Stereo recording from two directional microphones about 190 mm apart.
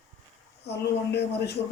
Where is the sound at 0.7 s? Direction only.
60° left (ahead or behind).